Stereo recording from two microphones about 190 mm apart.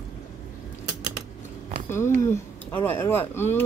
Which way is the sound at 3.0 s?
10° left (ahead or behind).